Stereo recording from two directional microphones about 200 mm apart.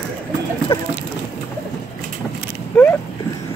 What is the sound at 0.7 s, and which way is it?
Speech, 25° left (ahead or behind).